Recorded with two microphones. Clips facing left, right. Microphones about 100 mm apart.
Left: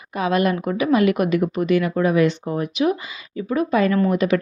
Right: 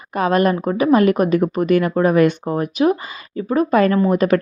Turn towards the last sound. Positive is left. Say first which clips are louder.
# right 3 dB
turn(degrees=-45)  # may be behind; listen again after turning